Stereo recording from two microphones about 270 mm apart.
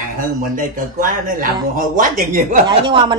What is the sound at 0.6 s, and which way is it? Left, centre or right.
Speech, right.